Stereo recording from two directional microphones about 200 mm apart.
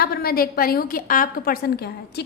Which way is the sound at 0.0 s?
50° left (ahead or behind).